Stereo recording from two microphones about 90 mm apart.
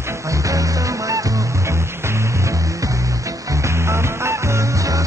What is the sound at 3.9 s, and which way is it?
Music, 30° right (ahead or behind).